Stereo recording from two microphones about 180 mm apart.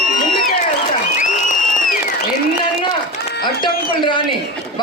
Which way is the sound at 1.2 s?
45° left (ahead or behind).